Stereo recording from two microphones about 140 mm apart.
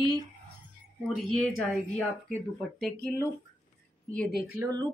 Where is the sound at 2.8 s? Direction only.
5° left (ahead or behind).